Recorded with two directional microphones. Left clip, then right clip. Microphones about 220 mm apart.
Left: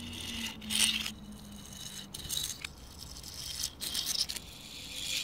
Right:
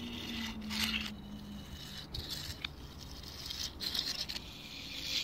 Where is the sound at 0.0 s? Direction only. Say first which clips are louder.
Left 2 dB; 10° right (ahead or behind).